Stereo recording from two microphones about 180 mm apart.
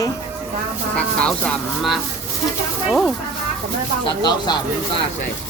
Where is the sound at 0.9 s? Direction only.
5° left (ahead or behind).